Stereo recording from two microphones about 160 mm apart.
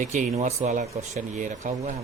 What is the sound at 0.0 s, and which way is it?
Speech, 50° right (ahead or behind).